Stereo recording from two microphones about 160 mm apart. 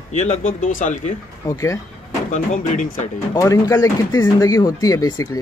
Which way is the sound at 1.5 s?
20° left (ahead or behind).